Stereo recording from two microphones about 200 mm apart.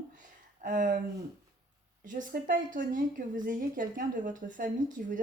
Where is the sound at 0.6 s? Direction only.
40° right (ahead or behind).